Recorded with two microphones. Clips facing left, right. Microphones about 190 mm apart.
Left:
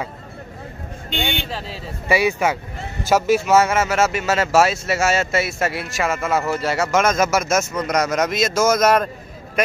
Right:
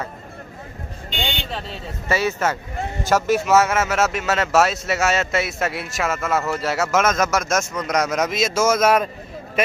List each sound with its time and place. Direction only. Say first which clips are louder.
1.2 s speech: left 2 dB; 55° left (ahead or behind)
2.0 s a man's voice: left 3 dB; 15° left (ahead or behind); by 9.1 s 5° right (ahead or behind)